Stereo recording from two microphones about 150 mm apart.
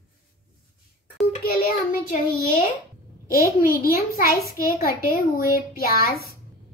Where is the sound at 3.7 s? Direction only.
75° left (ahead or behind).